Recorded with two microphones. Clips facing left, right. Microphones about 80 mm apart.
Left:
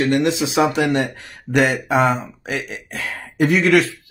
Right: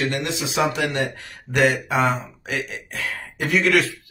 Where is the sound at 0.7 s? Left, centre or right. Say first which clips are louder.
Left 5 dB; left.